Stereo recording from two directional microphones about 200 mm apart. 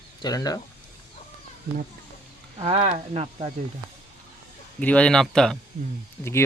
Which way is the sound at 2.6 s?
30° right (ahead or behind).